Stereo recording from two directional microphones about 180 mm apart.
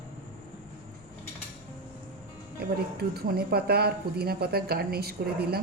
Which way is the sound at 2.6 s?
60° right (ahead or behind).